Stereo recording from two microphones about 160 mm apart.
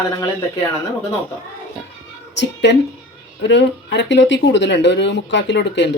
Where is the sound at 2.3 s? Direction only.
90° left.